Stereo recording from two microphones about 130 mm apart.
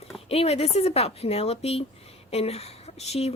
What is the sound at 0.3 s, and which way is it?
A woman's voice, 50° left (ahead or behind).